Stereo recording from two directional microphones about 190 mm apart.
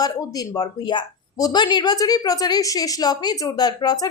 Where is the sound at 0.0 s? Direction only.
20° left (ahead or behind).